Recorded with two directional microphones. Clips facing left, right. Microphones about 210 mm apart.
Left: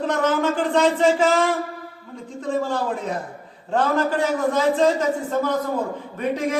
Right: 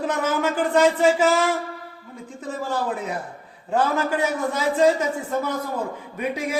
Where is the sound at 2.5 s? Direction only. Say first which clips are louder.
Left 3 dB; 5° right (ahead or behind).